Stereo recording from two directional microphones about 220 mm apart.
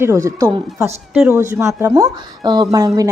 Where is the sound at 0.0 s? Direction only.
15° right (ahead or behind).